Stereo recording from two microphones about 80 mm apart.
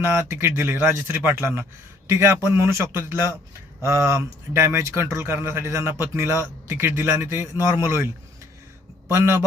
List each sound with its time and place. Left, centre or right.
0.0 s a man's voice: right